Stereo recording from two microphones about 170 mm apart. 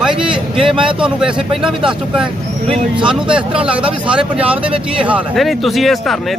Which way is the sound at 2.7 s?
30° right (ahead or behind).